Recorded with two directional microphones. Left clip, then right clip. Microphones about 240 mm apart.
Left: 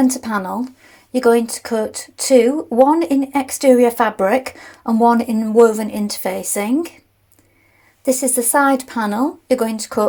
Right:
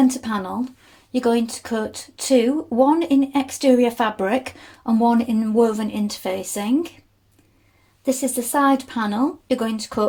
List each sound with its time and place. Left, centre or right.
0.1 s speech: left
8.0 s speech: left